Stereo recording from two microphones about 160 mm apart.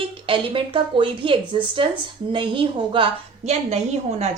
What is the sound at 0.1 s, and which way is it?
A woman's voice, 35° right (ahead or behind).